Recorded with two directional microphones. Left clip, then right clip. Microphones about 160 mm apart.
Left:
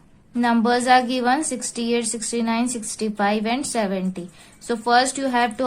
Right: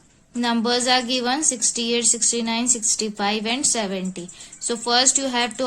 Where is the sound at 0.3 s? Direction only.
25° right (ahead or behind).